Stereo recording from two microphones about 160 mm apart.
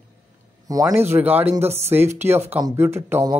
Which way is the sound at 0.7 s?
20° right (ahead or behind).